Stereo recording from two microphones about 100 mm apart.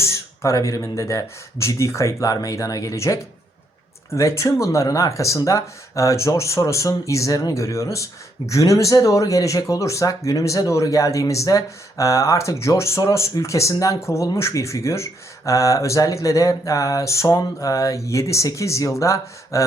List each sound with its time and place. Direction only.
0.0 s speech: 30° left (ahead or behind)